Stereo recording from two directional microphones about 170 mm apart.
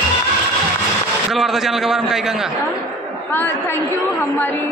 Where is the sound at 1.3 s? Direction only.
Centre (ahead or behind).